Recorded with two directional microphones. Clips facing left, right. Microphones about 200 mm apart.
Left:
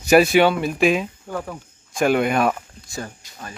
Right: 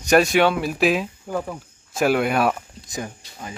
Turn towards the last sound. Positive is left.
turn(degrees=-15)  # may be behind; listen again after turning